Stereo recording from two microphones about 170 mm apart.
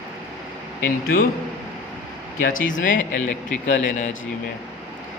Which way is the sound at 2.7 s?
50° left (ahead or behind).